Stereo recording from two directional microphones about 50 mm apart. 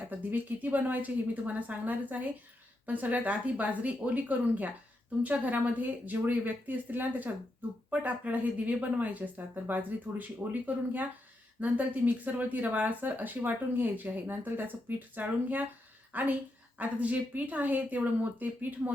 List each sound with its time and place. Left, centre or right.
0.1 s speech: right